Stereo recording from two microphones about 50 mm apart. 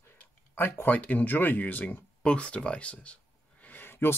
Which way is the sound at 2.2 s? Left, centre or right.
Left.